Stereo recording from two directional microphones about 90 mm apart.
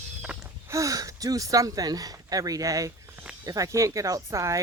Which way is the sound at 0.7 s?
40° right (ahead or behind).